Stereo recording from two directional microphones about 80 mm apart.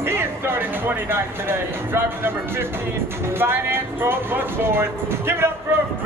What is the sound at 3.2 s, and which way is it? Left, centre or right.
Speech, right.